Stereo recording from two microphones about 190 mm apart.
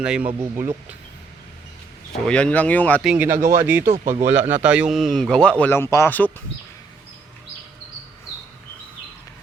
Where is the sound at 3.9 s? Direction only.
35° right (ahead or behind).